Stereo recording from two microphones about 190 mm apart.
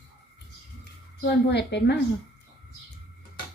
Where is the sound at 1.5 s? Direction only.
65° left (ahead or behind).